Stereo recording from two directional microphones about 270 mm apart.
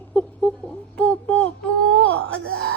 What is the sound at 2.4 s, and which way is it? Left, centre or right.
Speech, right.